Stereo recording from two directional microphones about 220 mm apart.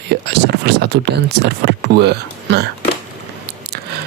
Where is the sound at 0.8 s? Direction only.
50° right (ahead or behind).